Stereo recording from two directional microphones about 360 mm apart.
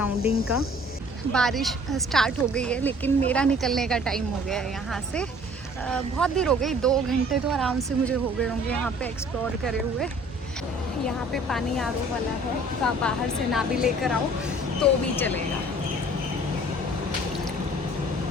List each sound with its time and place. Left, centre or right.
0.2 s speech: centre
0.4 s speech: left
1.3 s speech: centre
11.0 s speech: centre